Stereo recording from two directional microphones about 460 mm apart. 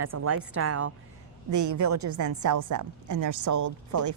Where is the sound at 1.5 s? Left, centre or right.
Right.